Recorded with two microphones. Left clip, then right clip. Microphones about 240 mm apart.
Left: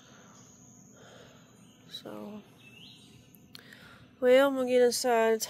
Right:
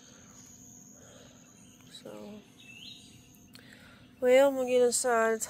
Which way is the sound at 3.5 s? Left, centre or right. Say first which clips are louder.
Left 3 dB; left.